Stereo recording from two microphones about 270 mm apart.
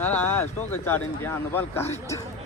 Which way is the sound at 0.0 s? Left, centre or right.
Centre.